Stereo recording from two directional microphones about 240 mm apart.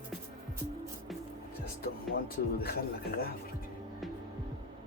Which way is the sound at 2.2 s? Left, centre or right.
Left.